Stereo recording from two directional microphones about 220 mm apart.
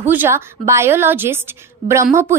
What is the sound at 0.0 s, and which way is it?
A woman's voice, 10° right (ahead or behind).